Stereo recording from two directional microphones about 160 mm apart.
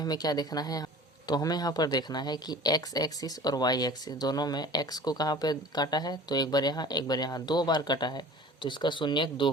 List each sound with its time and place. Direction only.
0.0 s speech: 25° left (ahead or behind)